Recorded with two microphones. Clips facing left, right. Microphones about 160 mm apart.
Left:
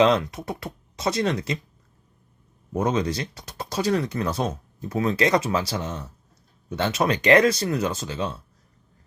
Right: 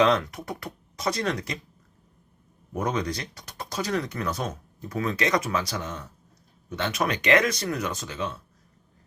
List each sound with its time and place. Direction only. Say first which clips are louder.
0.0 s speech: left 3 dB; 25° left (ahead or behind)
2.7 s speech: left 4 dB; 25° left (ahead or behind)